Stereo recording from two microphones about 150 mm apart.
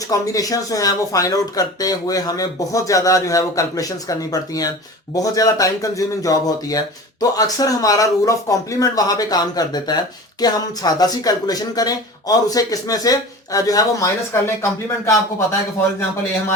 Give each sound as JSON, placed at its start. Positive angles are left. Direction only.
{"t": 0.1, "sound": "speech", "side_deg": 25}